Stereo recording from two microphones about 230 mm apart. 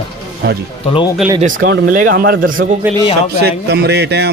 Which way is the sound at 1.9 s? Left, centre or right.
Right.